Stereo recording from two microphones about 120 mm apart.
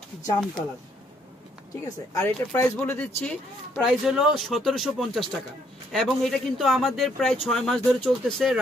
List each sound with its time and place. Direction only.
2.1 s speech: 20° left (ahead or behind)
3.8 s speech: 5° right (ahead or behind)